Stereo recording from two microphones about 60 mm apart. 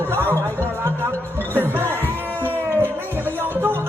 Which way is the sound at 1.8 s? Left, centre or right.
Left.